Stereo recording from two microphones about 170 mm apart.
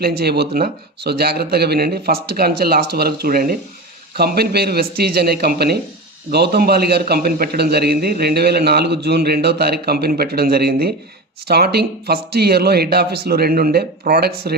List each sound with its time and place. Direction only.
0.0 s a man's voice: 70° right (ahead or behind)